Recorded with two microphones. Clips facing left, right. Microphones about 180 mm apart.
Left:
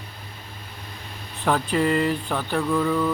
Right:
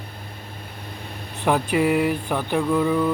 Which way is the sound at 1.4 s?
10° right (ahead or behind).